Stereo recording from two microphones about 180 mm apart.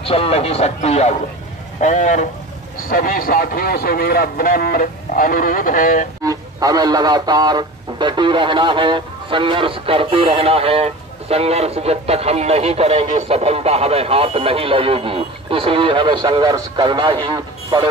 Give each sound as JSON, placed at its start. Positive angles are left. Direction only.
{"t": 0.0, "sound": "a man's voice", "side_deg": 30}
{"t": 6.2, "sound": "a man's voice", "side_deg": -20}